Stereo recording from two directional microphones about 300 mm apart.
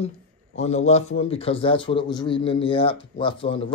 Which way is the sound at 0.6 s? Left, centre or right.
Left.